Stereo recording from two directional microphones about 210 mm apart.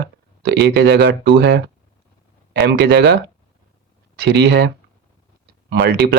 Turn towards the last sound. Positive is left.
turn(degrees=-50)  # may be behind; listen again after turning